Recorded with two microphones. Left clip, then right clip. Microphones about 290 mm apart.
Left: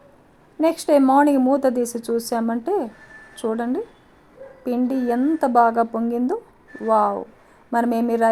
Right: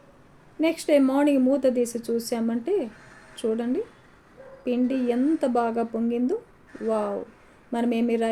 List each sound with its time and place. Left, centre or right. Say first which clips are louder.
0.6 s a woman's voice: left 4 dB; centre
7.7 s a woman's voice: left 5 dB; centre